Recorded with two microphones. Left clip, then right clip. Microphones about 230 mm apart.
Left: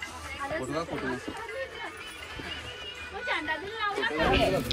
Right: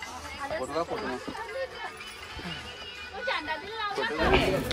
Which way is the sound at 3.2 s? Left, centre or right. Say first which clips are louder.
Even; right.